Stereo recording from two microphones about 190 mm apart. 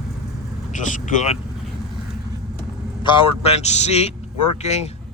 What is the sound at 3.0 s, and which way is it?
Speech, 25° left (ahead or behind).